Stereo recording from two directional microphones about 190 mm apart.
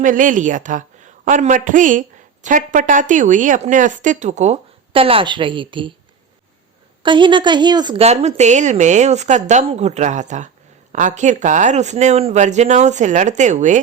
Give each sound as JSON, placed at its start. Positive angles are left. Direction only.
{"t": 0.0, "sound": "a woman's voice", "side_deg": -45}
{"t": 7.0, "sound": "a woman's voice", "side_deg": -25}